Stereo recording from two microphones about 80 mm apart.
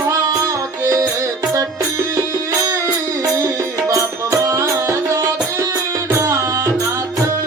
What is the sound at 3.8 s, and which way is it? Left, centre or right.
Music, right.